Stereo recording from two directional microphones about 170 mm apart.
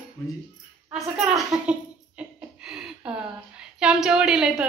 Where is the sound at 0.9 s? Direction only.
5° right (ahead or behind).